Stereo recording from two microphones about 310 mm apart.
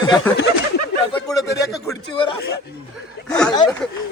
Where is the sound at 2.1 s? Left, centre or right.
Centre.